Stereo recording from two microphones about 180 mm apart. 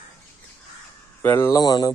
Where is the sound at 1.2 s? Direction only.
15° left (ahead or behind).